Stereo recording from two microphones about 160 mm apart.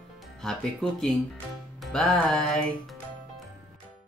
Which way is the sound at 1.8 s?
Centre (ahead or behind).